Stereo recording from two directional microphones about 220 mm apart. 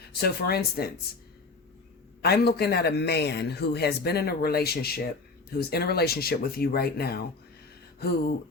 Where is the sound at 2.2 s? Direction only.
45° left (ahead or behind).